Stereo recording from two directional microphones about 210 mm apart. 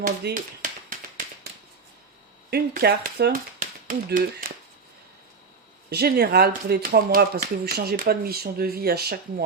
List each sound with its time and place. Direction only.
0.0 s a sound: 45° right (ahead or behind)
2.5 s speech: 50° right (ahead or behind)
5.9 s speech: 50° right (ahead or behind)